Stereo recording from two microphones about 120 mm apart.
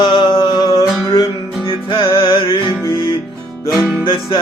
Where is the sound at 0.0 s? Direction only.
40° left (ahead or behind).